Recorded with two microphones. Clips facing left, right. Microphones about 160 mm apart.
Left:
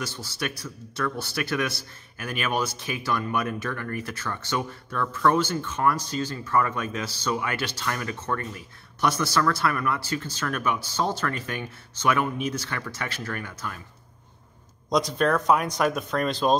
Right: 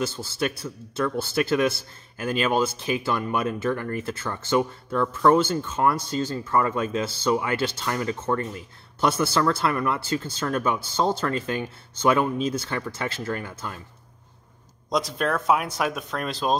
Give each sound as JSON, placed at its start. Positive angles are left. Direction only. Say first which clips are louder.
{"t": 0.2, "sound": "speech", "louder": "right 5 dB", "side_deg": -25}
{"t": 14.9, "sound": "speech", "louder": "left 2 dB", "side_deg": 0}